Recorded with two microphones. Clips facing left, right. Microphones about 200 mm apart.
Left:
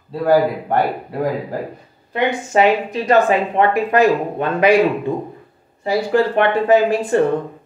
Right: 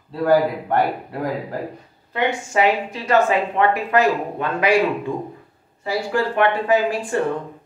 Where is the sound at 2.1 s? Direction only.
20° left (ahead or behind).